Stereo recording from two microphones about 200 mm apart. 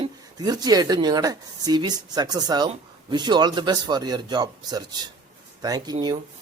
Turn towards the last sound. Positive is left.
turn(degrees=-20)  # may be behind; listen again after turning